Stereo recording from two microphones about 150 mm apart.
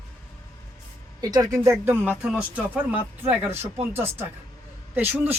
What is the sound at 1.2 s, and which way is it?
Speech, 25° right (ahead or behind).